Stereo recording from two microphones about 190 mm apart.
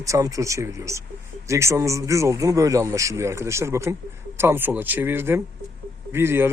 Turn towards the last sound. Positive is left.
turn(degrees=-10)  # may be behind; listen again after turning